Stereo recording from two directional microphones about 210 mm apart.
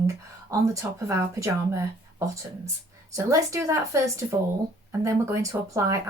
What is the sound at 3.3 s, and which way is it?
Speech, 15° right (ahead or behind).